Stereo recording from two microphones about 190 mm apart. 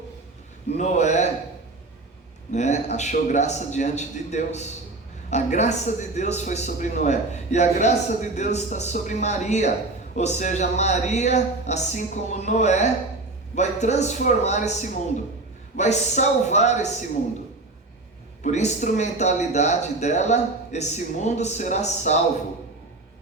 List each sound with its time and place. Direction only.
0.8 s a man's voice: 35° left (ahead or behind)
2.5 s a man's voice: 40° left (ahead or behind)
18.4 s a man's voice: 40° left (ahead or behind)